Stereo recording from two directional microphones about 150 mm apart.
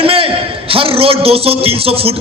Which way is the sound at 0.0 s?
40° right (ahead or behind).